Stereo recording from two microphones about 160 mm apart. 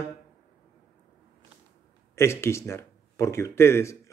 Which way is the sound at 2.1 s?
15° left (ahead or behind).